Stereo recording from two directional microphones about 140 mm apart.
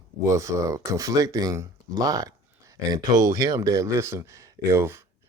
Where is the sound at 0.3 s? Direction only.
20° right (ahead or behind).